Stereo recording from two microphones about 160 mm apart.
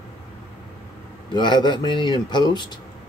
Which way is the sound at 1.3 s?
30° left (ahead or behind).